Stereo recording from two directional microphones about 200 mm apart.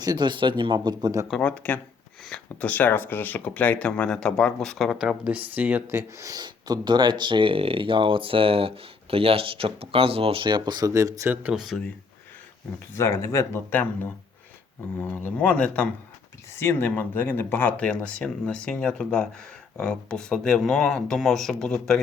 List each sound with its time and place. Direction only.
0.0 s speech: 20° right (ahead or behind)
1.3 s speech: 5° left (ahead or behind)
12.9 s speech: 15° left (ahead or behind)